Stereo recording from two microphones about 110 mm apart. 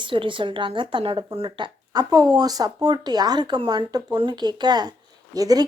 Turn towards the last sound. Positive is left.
turn(degrees=-35)  # may be behind; listen again after turning